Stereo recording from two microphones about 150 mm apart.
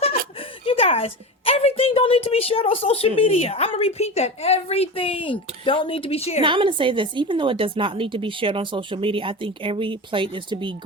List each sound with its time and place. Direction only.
0.6 s a woman's voice: 40° left (ahead or behind)
6.4 s a woman's voice: 35° right (ahead or behind)